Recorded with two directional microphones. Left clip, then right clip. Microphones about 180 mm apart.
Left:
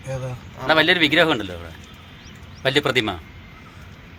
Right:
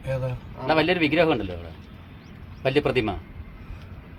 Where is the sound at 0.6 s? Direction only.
5° left (ahead or behind).